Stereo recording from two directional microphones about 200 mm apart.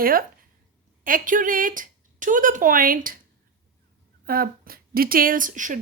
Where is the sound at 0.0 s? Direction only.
45° right (ahead or behind).